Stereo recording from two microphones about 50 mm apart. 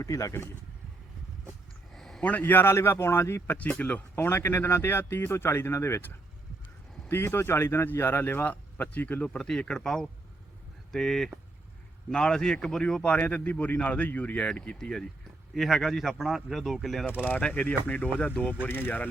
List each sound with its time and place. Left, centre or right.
0.0 s speech: left
1.9 s a sound: centre
2.2 s speech: left
2.6 s speech: left
3.6 s speech: left
4.1 s speech: left
5.7 s speech: left
7.1 s speech: left
7.9 s speech: left
9.4 s speech: centre
13.1 s speech: left
14.8 s speech: centre
17.5 s speech: left
18.6 s speech: left